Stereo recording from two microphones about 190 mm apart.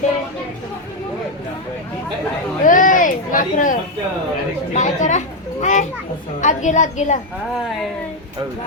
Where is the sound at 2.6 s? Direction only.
45° left (ahead or behind).